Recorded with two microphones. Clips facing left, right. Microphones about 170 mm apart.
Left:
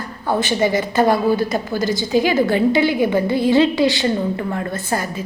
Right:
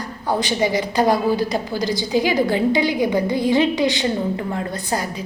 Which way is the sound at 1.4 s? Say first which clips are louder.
Left 1 dB; 50° left (ahead or behind).